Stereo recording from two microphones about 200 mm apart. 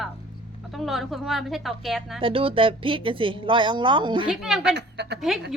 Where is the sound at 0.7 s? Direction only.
Centre (ahead or behind).